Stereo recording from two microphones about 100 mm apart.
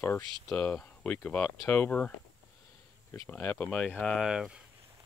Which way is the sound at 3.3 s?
20° left (ahead or behind).